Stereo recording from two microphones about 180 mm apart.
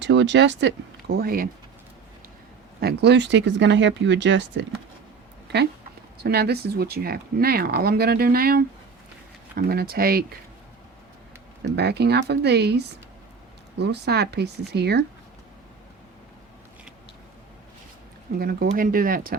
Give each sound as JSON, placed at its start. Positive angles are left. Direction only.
{"t": 0.0, "sound": "speech", "side_deg": -80}
{"t": 2.8, "sound": "speech", "side_deg": -70}
{"t": 6.2, "sound": "speech", "side_deg": -65}
{"t": 11.6, "sound": "speech", "side_deg": -65}
{"t": 18.3, "sound": "speech", "side_deg": -60}